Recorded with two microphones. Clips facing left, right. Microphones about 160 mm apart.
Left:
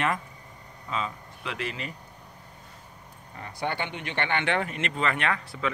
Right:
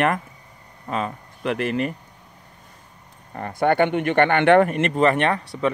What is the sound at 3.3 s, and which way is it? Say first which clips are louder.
A man's voice: right 11 dB; 50° right (ahead or behind).